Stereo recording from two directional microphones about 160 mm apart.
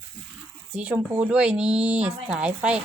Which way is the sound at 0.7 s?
5° right (ahead or behind).